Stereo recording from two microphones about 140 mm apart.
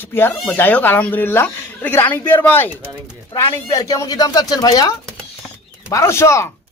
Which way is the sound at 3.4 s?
25° left (ahead or behind).